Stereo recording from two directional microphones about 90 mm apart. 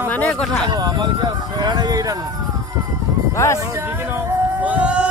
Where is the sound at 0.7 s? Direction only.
55° right (ahead or behind).